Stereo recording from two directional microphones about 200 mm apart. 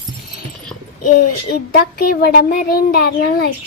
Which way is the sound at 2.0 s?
50° left (ahead or behind).